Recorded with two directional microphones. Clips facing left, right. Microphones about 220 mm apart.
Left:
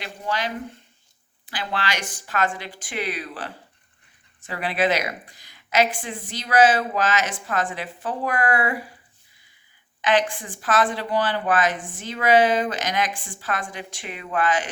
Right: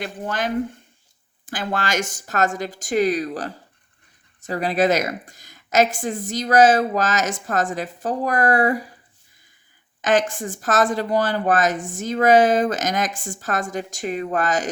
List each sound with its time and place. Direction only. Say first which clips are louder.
0.0 s speech: right 3 dB; 50° right (ahead or behind)
10.0 s speech: right 2 dB; 45° right (ahead or behind)